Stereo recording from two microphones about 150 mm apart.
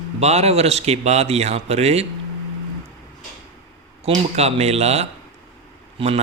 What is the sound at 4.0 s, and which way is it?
Speech, 45° right (ahead or behind).